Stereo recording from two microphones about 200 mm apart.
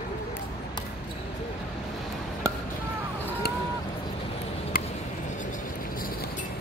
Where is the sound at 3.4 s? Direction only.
55° left (ahead or behind).